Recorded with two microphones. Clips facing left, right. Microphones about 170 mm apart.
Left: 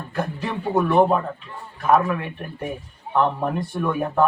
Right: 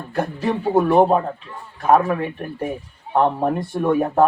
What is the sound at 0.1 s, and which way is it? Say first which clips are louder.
Speech: right 5 dB; 30° right (ahead or behind).